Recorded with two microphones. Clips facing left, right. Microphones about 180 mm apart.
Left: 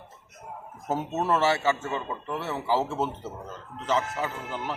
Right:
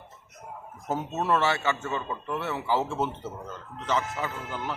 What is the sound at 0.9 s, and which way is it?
Speech, centre (ahead or behind).